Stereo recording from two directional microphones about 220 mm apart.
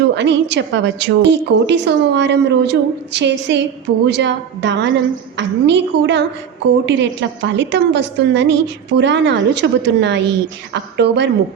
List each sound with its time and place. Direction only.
0.2 s a woman's voice: 50° right (ahead or behind)